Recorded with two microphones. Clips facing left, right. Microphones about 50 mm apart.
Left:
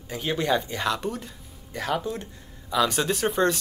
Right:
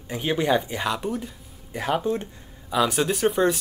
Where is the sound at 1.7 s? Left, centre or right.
Centre.